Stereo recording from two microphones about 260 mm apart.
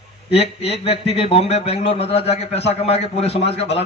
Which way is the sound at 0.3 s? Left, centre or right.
Left.